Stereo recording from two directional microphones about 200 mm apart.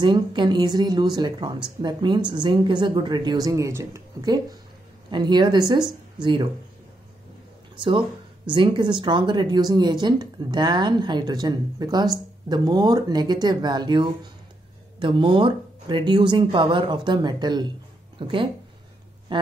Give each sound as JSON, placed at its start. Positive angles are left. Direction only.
{"t": 0.0, "sound": "speech", "side_deg": -20}
{"t": 8.5, "sound": "speech", "side_deg": -20}